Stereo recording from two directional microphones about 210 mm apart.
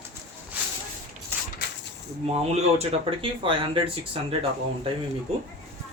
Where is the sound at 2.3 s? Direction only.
30° right (ahead or behind).